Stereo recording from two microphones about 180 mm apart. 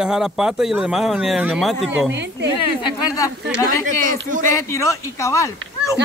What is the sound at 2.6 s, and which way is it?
Speech, 20° left (ahead or behind).